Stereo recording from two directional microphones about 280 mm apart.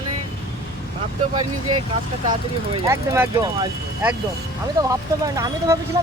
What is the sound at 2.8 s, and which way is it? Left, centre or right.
Speech, centre.